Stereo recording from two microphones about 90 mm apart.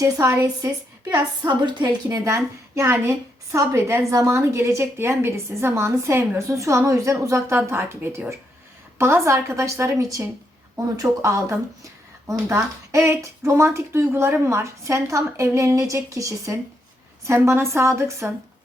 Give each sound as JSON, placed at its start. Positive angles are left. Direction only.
{"t": 0.0, "sound": "a woman's voice", "side_deg": -35}
{"t": 2.0, "sound": "a woman's voice", "side_deg": -35}